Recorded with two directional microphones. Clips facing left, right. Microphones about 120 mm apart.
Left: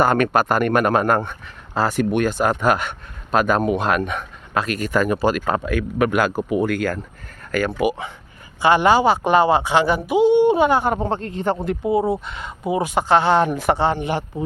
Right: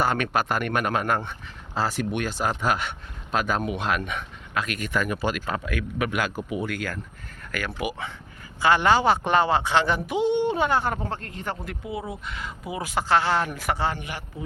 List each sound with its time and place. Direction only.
0.0 s speech: 50° left (ahead or behind)
7.5 s speech: 30° left (ahead or behind)
8.6 s speech: 15° left (ahead or behind)